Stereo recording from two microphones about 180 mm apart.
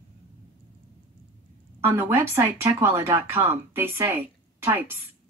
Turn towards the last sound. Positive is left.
turn(degrees=-10)  # may be behind; listen again after turning